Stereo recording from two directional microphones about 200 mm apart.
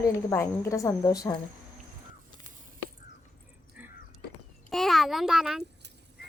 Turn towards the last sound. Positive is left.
turn(degrees=0)  # may be behind; listen again after turning